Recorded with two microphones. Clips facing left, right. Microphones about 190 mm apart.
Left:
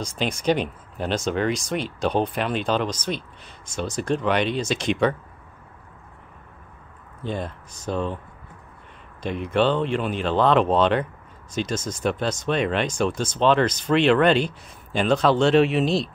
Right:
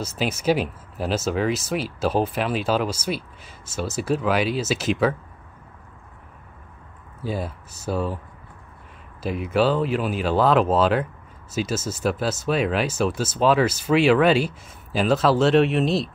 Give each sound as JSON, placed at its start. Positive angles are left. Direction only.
{"t": 0.0, "sound": "speech", "side_deg": -5}
{"t": 7.2, "sound": "speech", "side_deg": -5}
{"t": 9.2, "sound": "speech", "side_deg": -5}